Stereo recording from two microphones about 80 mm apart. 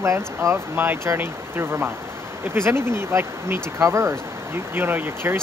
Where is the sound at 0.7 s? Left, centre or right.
Right.